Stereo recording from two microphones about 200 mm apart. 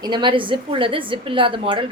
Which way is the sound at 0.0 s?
25° right (ahead or behind).